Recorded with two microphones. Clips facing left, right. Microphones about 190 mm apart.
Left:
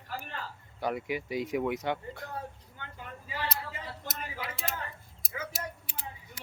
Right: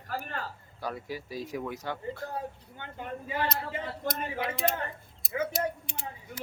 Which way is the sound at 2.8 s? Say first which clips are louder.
Right 7 dB; 25° right (ahead or behind).